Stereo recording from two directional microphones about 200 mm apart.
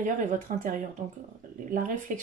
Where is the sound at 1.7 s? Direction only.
40° right (ahead or behind).